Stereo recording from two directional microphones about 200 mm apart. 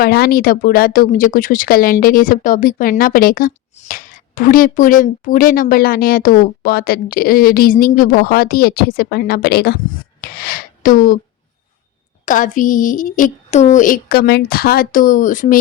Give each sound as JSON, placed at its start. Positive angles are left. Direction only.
{"t": 0.0, "sound": "speech", "side_deg": 50}
{"t": 12.2, "sound": "speech", "side_deg": 40}